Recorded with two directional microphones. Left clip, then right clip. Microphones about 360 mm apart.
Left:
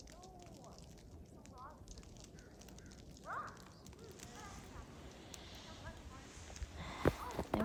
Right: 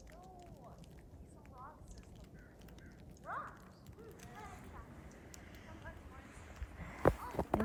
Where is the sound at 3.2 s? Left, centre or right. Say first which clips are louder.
Right 1 dB; right.